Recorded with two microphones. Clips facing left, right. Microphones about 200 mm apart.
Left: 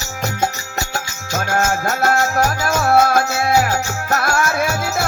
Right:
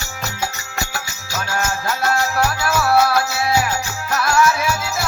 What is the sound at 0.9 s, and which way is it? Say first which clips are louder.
Music: left 4 dB; 50° left (ahead or behind).